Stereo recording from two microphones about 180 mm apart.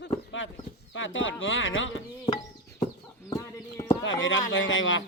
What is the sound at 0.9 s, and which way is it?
Speech, 90° left.